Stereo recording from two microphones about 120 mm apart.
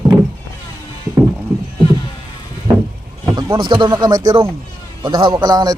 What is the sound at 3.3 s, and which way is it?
A man's voice, 35° right (ahead or behind).